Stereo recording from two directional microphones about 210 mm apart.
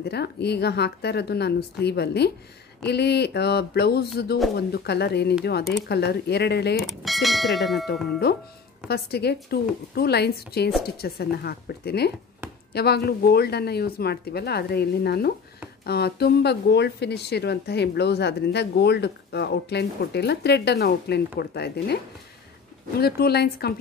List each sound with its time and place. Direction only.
0.0 s speech: 50° left (ahead or behind)
6.8 s speech: centre (ahead or behind)
7.9 s speech: 50° left (ahead or behind)